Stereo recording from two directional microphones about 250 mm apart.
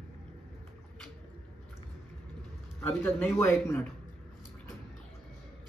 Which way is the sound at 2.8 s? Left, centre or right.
Centre.